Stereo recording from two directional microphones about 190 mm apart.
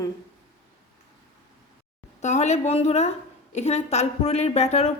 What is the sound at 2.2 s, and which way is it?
A woman's voice, 35° left (ahead or behind).